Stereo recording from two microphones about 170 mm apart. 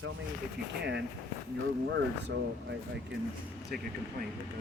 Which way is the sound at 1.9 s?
90° right.